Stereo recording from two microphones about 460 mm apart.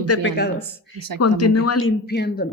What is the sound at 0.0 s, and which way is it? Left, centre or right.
Speech, left.